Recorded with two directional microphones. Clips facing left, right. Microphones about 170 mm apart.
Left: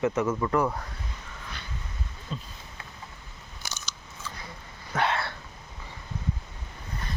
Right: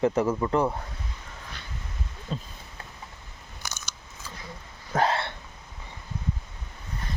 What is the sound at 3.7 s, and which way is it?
Scissors, 50° right (ahead or behind).